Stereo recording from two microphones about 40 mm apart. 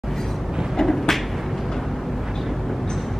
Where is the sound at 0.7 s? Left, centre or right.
Centre.